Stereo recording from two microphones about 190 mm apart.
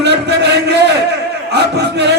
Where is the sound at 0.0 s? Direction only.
65° right (ahead or behind).